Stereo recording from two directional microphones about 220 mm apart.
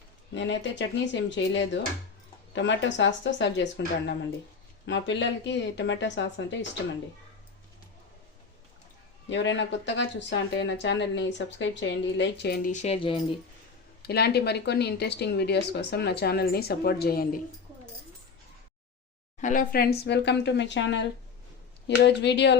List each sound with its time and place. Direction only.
0.3 s speech: 55° left (ahead or behind)
9.3 s speech: 55° left (ahead or behind); by 13.2 s 25° left (ahead or behind)
14.0 s speech: 45° left (ahead or behind)
19.4 s speech: 35° left (ahead or behind); by 22.5 s 50° left (ahead or behind)